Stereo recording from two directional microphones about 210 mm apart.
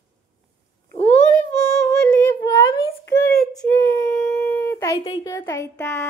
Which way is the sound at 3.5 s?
15° left (ahead or behind).